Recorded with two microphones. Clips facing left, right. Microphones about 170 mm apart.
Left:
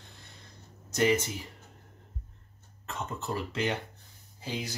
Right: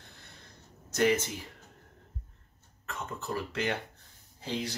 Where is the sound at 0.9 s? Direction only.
15° left (ahead or behind).